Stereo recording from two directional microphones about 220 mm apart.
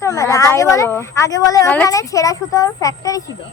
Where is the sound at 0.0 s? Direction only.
15° left (ahead or behind).